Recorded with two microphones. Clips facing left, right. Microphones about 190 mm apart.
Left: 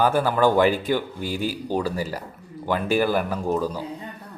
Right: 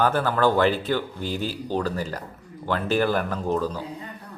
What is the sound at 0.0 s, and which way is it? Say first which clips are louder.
Speech: left 2 dB; 10° left (ahead or behind).